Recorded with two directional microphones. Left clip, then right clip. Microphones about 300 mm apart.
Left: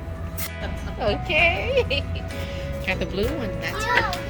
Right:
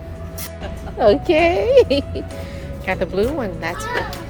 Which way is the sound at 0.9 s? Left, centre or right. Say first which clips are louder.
Right 8 dB; right.